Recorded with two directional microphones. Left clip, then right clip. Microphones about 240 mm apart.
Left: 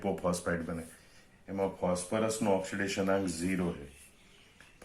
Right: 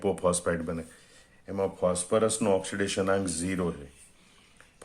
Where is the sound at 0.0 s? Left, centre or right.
Right.